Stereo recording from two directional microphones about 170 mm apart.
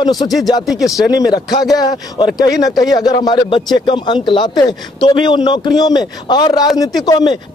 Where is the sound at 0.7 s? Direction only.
Centre (ahead or behind).